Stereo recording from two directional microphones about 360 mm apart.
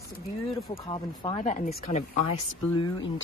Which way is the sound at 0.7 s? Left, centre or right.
Centre.